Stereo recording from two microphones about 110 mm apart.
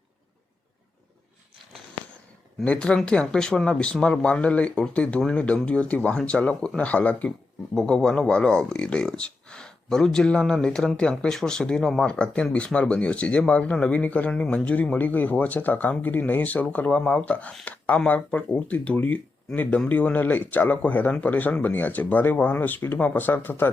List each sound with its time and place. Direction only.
2.6 s speech: 10° left (ahead or behind)